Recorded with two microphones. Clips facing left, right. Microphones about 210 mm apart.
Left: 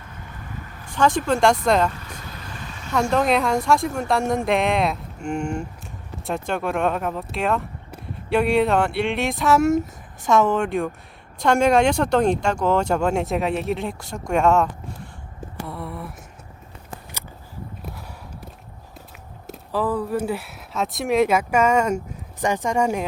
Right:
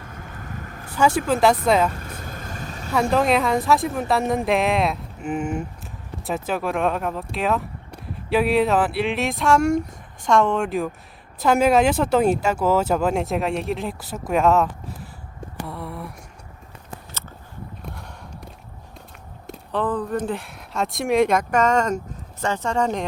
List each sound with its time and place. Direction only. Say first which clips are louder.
0.9 s speech: even; 10° right (ahead or behind)
2.0 s vehicle: right 3 dB; 45° right (ahead or behind)
2.9 s speech: right 1 dB; centre (ahead or behind)
17.8 s clip-clop: even; 5° left (ahead or behind)
19.5 s speech: even; 5° left (ahead or behind)